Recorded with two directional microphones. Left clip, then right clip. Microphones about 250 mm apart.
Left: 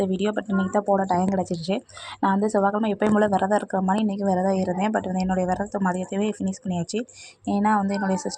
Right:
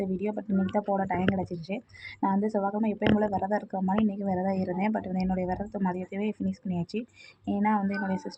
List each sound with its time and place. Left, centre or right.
0.0 s speech: centre